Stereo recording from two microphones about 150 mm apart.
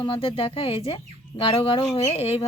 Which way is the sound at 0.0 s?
35° left (ahead or behind).